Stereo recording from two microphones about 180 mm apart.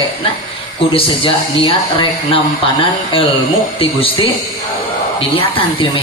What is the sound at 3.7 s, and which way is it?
A man's voice, 30° left (ahead or behind).